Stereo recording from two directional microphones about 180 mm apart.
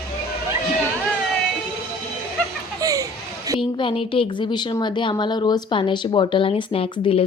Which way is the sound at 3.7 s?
30° left (ahead or behind).